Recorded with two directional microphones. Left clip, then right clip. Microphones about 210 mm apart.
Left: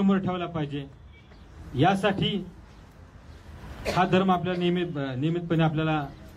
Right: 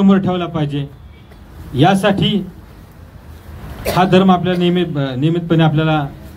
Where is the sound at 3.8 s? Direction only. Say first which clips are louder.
Right 11 dB; 50° right (ahead or behind).